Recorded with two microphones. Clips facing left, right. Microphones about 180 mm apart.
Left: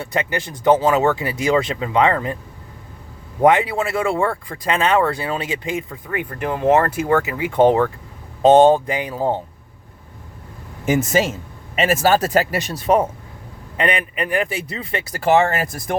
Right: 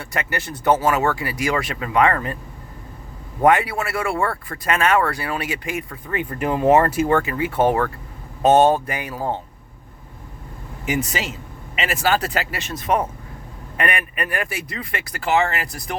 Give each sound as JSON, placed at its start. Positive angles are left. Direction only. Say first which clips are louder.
{"t": 0.0, "sound": "speech", "louder": "left 4 dB", "side_deg": 20}
{"t": 3.4, "sound": "speech", "louder": "left 2 dB", "side_deg": 20}
{"t": 6.2, "sound": "speech", "louder": "right 1 dB", "side_deg": -5}
{"t": 7.2, "sound": "speech", "louder": "left 4 dB", "side_deg": 10}
{"t": 10.8, "sound": "speech", "louder": "left 7 dB", "side_deg": 45}
{"t": 13.7, "sound": "speech", "louder": "left 3 dB", "side_deg": 20}
{"t": 15.2, "sound": "speech", "louder": "left 4 dB", "side_deg": 40}